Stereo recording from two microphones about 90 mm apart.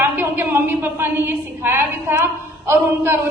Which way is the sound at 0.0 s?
25° right (ahead or behind).